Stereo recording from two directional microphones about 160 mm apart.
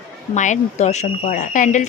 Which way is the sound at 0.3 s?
50° left (ahead or behind).